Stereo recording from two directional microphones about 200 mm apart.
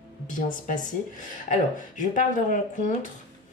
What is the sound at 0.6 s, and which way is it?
Speech, 40° left (ahead or behind).